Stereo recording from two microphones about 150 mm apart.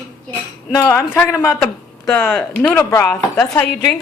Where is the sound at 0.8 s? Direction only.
20° left (ahead or behind).